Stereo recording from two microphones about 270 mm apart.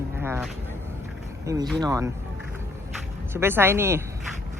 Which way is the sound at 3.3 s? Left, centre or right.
Centre.